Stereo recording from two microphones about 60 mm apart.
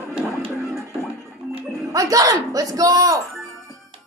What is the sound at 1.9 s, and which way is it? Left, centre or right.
Speech, right.